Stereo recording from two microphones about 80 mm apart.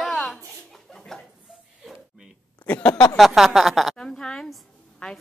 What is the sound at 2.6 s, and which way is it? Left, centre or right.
Speech, centre.